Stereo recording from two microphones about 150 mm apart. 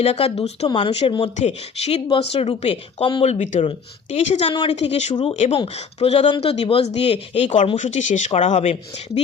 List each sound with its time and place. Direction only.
0.0 s speech: 40° left (ahead or behind)
0.7 s speech: 35° left (ahead or behind)
1.4 s speech: 45° left (ahead or behind)
3.3 s speech: 55° left (ahead or behind)
3.6 s speech: 45° left (ahead or behind)
5.1 s speech: 30° left (ahead or behind)
5.6 s speech: 45° left (ahead or behind)